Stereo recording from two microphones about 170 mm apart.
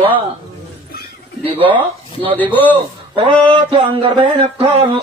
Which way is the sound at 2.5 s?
10° left (ahead or behind).